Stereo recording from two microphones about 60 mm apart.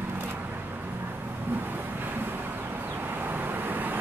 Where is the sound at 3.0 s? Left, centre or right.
Right.